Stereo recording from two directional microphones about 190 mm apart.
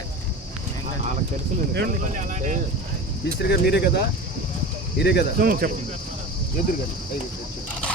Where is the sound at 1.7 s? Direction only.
45° right (ahead or behind).